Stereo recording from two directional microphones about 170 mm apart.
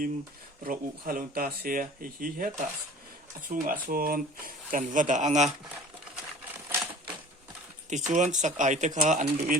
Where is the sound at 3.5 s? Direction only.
55° right (ahead or behind).